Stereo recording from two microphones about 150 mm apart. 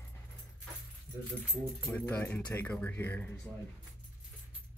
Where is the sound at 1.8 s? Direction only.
10° left (ahead or behind).